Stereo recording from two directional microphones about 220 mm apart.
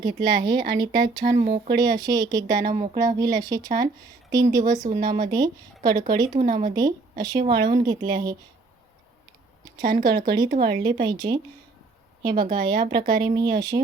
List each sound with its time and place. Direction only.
0.0 s speech: 20° right (ahead or behind)
1.5 s speech: 45° right (ahead or behind)
1.7 s speech: 20° right (ahead or behind)
6.4 s speech: 40° right (ahead or behind)
6.7 s speech: 20° right (ahead or behind)
9.6 s speech: 20° right (ahead or behind)
10.5 s speech: 45° right (ahead or behind)
11.0 s speech: 20° right (ahead or behind)